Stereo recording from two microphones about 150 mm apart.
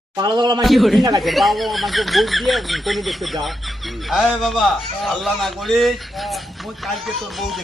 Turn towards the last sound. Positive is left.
turn(degrees=0)  # may be behind; listen again after turning